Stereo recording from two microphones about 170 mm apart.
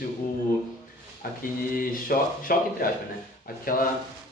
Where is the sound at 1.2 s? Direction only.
55° left (ahead or behind).